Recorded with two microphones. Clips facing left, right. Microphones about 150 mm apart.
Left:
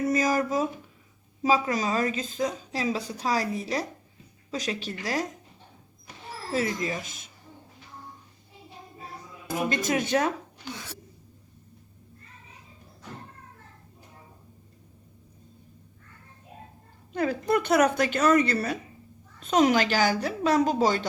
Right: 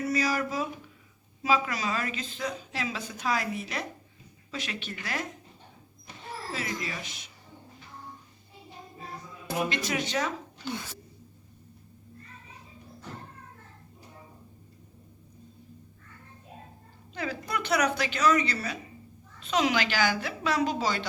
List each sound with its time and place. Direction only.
0.1 s a woman's voice: 45° left (ahead or behind)
6.5 s a woman's voice: 45° left (ahead or behind)
9.5 s a woman's voice: 45° left (ahead or behind)
17.1 s a woman's voice: 50° left (ahead or behind)